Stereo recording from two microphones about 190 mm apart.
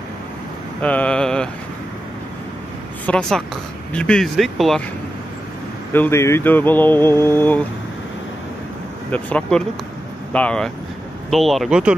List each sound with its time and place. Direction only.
0.8 s mantra: 5° left (ahead or behind)
3.1 s speech: 5° left (ahead or behind)
5.9 s speech: 15° left (ahead or behind)
9.1 s speech: 5° left (ahead or behind)